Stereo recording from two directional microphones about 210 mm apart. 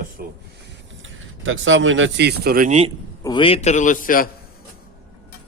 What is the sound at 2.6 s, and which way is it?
Speech, 30° right (ahead or behind).